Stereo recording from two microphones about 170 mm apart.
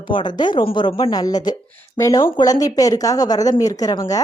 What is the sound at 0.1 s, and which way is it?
Speech, 25° left (ahead or behind).